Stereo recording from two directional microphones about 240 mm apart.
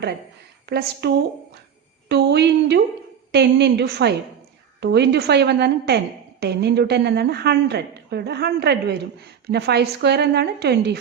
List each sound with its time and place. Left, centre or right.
0.6 s a woman's voice: right